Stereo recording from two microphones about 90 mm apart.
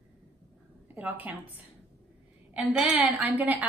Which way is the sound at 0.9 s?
20° right (ahead or behind).